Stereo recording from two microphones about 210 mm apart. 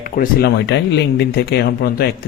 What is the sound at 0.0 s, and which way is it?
Speech, 45° left (ahead or behind).